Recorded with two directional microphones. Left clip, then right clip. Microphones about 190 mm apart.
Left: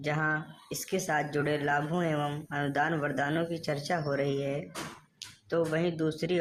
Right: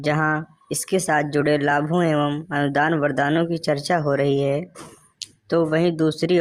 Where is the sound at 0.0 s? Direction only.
40° right (ahead or behind).